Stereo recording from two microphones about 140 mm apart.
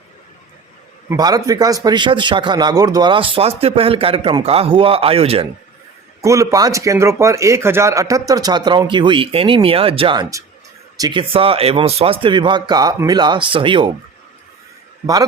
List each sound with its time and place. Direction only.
1.1 s a man's voice: 25° right (ahead or behind); by 5.5 s 45° right (ahead or behind)
6.2 s a man's voice: 20° right (ahead or behind); by 10.2 s 40° right (ahead or behind)
10.9 s speech: 25° right (ahead or behind)
11.2 s speech: 40° right (ahead or behind)